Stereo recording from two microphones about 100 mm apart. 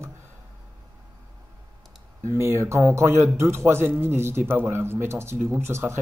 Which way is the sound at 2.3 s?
25° right (ahead or behind).